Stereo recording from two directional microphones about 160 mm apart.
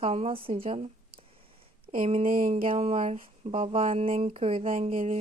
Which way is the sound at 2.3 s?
55° right (ahead or behind).